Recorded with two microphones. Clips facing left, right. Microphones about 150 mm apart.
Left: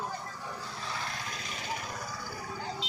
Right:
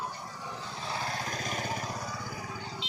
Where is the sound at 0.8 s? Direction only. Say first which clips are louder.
Right 5 dB; 35° right (ahead or behind).